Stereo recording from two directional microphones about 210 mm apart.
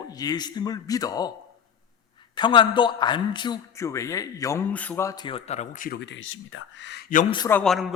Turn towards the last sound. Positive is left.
turn(degrees=0)  # may be behind; listen again after turning